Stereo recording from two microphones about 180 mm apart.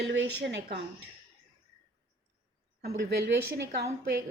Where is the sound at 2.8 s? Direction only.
70° right (ahead or behind).